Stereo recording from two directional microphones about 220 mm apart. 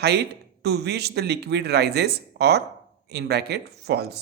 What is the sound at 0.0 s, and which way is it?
Speech, 50° right (ahead or behind).